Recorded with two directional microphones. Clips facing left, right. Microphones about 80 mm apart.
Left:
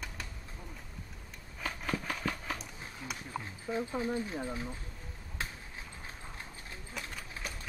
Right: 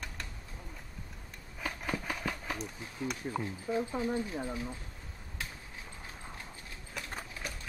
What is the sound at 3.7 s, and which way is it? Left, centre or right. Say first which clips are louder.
Speech: right 2 dB; centre.